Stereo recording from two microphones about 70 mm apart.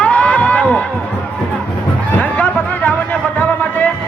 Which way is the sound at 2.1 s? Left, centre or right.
Left.